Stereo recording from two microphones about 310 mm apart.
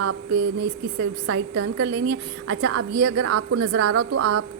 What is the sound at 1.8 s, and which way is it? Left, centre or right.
A woman's voice, right.